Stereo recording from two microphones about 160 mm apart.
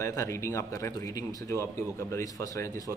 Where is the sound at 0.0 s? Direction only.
20° left (ahead or behind).